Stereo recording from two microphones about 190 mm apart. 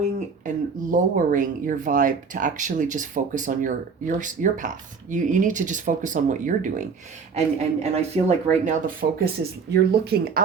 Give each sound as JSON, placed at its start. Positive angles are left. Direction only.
{"t": 0.4, "sound": "speech", "side_deg": -45}
{"t": 9.0, "sound": "speech", "side_deg": -50}